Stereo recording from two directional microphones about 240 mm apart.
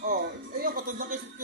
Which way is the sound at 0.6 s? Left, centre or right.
Right.